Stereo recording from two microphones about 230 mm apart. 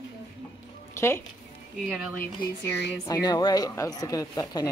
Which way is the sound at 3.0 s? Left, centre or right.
Centre.